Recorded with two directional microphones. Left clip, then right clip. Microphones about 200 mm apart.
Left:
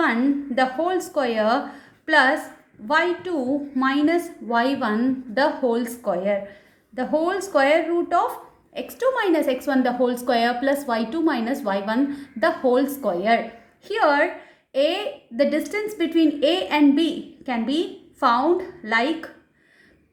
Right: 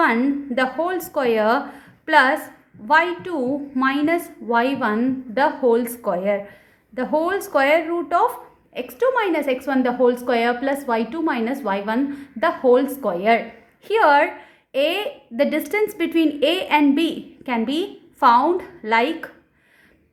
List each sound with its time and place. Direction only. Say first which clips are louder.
0.0 s a woman's voice: right 3 dB; 35° right (ahead or behind)